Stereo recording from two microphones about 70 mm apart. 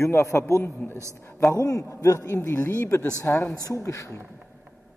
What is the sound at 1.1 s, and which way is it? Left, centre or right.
Speech, left.